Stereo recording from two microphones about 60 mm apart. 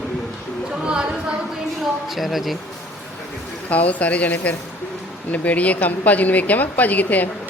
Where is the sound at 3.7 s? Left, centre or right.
Left.